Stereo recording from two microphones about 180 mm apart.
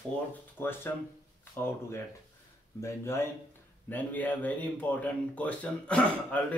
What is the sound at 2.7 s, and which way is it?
Speech, 15° left (ahead or behind).